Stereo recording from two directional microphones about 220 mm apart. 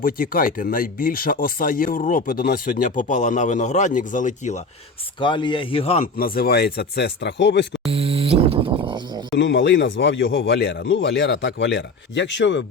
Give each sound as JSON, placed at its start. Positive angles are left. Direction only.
{"t": 0.0, "sound": "speech", "side_deg": 40}
{"t": 5.2, "sound": "a man's voice", "side_deg": 20}
{"t": 6.1, "sound": "speech", "side_deg": 40}
{"t": 7.9, "sound": "speech", "side_deg": -25}
{"t": 9.4, "sound": "speech", "side_deg": 55}